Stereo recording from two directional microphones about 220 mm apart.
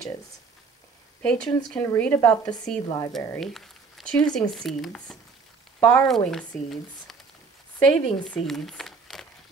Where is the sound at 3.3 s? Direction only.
Centre (ahead or behind).